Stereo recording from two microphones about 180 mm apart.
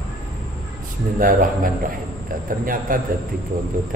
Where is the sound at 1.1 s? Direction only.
50° right (ahead or behind).